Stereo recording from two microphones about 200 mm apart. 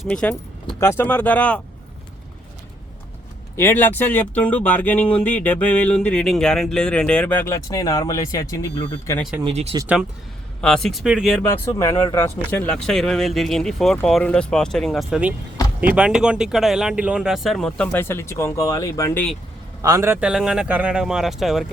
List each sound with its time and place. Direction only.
0.0 s speech: 5° left (ahead or behind)
3.5 s speech: 10° left (ahead or behind)
9.4 s speech: 30° right (ahead or behind)
9.8 s speech: 5° right (ahead or behind)
11.4 s speech: 15° left (ahead or behind)
12.5 s speech: 5° left (ahead or behind)
19.8 s speech: 15° right (ahead or behind)